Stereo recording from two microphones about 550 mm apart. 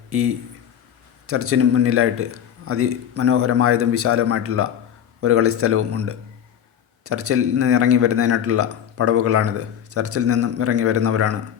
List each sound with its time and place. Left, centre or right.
0.1 s speech: right
1.3 s speech: right